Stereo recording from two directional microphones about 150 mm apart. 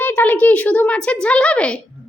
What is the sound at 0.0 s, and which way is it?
A woman's voice, 15° left (ahead or behind).